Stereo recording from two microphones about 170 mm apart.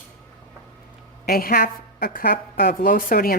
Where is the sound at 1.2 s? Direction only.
60° left (ahead or behind).